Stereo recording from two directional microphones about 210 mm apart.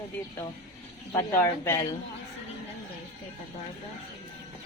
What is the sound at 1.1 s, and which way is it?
Speech, 10° left (ahead or behind).